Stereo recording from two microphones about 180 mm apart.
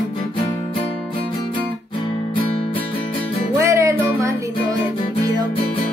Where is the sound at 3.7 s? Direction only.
15° right (ahead or behind).